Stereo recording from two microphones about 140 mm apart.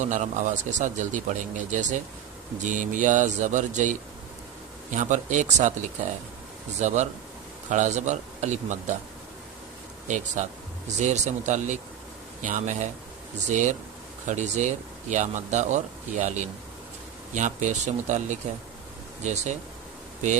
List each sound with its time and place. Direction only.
0.0 s speech: 60° right (ahead or behind)
10.4 s speech: 60° right (ahead or behind)